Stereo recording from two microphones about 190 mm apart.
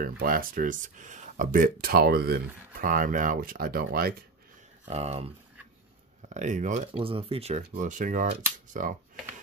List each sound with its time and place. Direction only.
0.0 s speech: 50° right (ahead or behind)
4.8 s speech: 35° right (ahead or behind)
7.0 s speech: 30° right (ahead or behind); by 8.9 s 45° right (ahead or behind)